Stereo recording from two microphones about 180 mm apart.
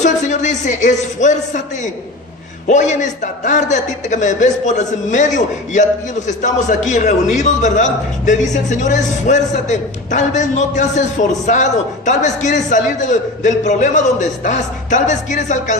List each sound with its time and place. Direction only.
0.0 s a man's voice: 40° left (ahead or behind)